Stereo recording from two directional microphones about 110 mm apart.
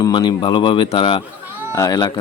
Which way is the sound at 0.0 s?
45° left (ahead or behind).